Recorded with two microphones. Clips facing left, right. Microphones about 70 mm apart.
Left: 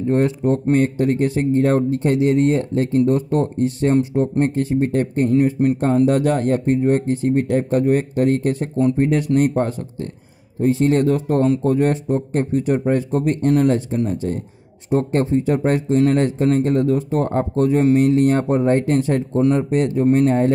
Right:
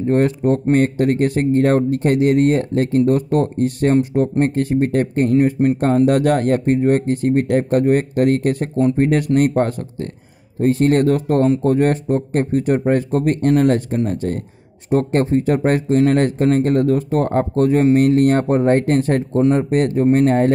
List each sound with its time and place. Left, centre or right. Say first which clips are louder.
0.1 s speech: right 2 dB; right
6.0 s speech: right 2 dB; right